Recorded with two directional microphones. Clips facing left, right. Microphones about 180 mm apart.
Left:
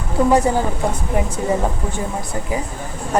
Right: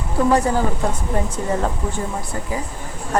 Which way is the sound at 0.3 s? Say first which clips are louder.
Left 1 dB; 20° left (ahead or behind).